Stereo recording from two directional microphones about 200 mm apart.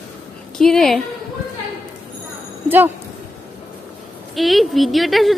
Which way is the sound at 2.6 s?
10° right (ahead or behind).